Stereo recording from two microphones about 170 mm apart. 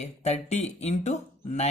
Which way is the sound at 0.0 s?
40° left (ahead or behind).